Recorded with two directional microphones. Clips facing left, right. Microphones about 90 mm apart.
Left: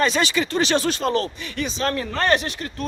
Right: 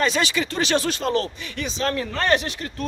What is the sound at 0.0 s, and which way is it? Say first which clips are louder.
A man's voice: left 2 dB; 35° left (ahead or behind).